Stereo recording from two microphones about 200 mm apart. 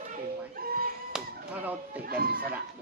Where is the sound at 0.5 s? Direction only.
45° right (ahead or behind).